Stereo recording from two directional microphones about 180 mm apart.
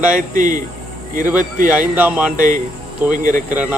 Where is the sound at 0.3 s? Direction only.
45° right (ahead or behind).